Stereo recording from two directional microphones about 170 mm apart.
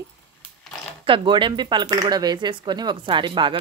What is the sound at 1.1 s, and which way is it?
Speech, 30° right (ahead or behind).